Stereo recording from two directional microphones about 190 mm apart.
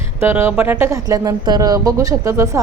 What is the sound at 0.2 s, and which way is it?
A woman's voice, 10° right (ahead or behind).